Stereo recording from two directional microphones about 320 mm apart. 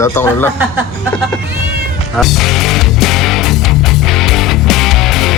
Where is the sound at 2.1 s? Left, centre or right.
Centre.